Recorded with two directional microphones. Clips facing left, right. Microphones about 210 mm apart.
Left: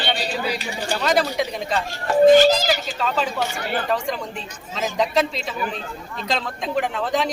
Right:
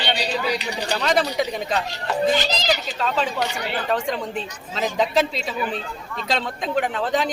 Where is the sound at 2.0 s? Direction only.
45° left (ahead or behind).